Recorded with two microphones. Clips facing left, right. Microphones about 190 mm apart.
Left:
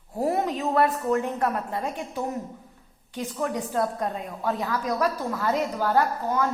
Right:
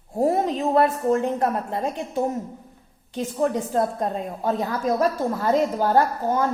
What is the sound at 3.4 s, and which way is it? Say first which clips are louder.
A woman's voice: right 4 dB; 30° right (ahead or behind).